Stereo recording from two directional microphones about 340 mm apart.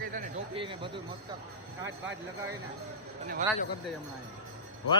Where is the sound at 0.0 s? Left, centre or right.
Right.